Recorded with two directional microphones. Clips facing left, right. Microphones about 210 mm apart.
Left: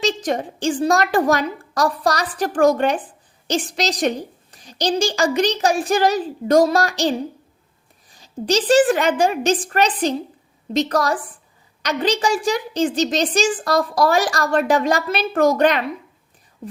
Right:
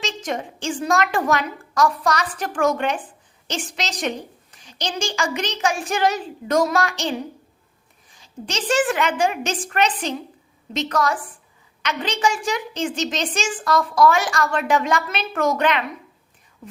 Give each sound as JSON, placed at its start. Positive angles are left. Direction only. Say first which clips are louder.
{"t": 0.0, "sound": "a woman's voice", "louder": "left 6 dB", "side_deg": 35}